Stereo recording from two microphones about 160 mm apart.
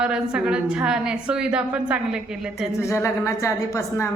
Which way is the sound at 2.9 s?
20° left (ahead or behind).